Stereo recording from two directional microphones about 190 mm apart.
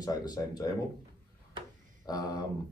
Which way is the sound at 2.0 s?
20° left (ahead or behind).